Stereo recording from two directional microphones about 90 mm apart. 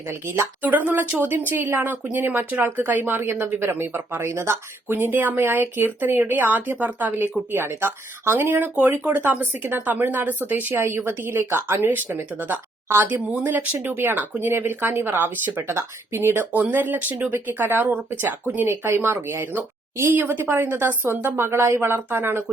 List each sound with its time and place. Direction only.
0.1 s speech: 25° right (ahead or behind)